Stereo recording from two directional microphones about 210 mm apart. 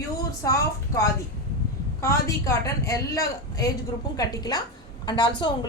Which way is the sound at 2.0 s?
15° left (ahead or behind).